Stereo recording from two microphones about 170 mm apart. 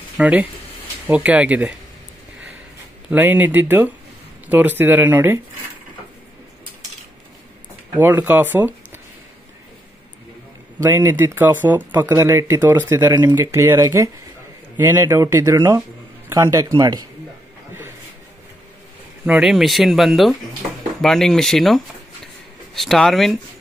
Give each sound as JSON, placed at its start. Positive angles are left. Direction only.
{"t": 0.2, "sound": "speech", "side_deg": -10}
{"t": 3.1, "sound": "speech", "side_deg": -10}
{"t": 8.0, "sound": "speech", "side_deg": -10}
{"t": 10.8, "sound": "a man's voice", "side_deg": -15}
{"t": 19.2, "sound": "speech", "side_deg": -5}